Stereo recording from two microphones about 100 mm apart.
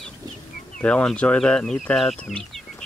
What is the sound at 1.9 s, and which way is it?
Bird, 5° left (ahead or behind).